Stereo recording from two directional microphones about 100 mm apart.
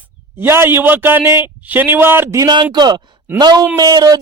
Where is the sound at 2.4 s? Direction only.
50° right (ahead or behind).